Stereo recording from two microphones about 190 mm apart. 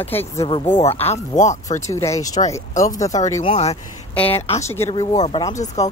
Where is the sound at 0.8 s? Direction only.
35° left (ahead or behind).